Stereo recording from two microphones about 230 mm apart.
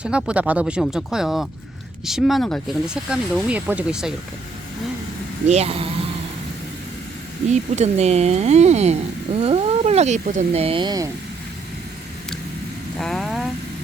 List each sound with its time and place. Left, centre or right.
0.0 s speech: centre
5.5 s speech: right
7.5 s speech: right
13.0 s vehicle: centre